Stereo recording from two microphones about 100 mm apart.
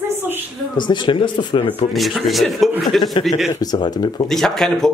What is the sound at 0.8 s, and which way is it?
Speech, 50° left (ahead or behind).